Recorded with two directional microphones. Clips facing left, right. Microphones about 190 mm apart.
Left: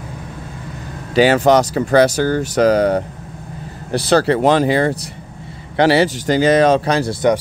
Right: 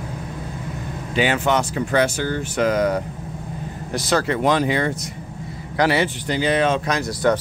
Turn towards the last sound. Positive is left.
turn(degrees=30)  # may be behind; listen again after turning